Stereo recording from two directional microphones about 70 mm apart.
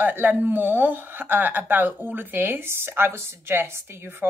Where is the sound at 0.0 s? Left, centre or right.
Right.